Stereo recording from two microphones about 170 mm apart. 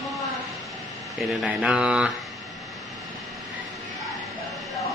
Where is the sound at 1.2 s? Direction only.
Centre (ahead or behind).